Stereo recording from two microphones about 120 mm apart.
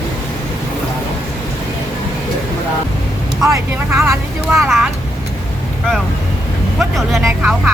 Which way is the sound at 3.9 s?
20° right (ahead or behind).